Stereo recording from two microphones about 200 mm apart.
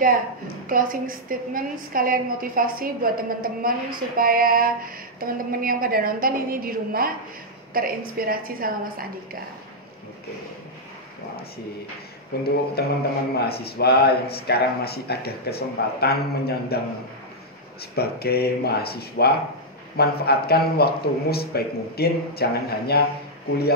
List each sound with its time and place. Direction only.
0.7 s a woman's voice: 45° right (ahead or behind)
12.3 s a man's voice: 50° left (ahead or behind)
17.9 s a man's voice: 50° left (ahead or behind)